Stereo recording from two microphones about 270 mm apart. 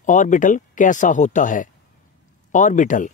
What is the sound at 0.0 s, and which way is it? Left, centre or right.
Speech, left.